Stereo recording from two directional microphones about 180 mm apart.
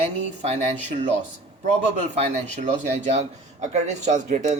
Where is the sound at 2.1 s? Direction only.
35° right (ahead or behind).